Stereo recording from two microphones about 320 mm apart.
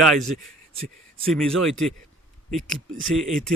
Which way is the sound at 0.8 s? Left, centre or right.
Right.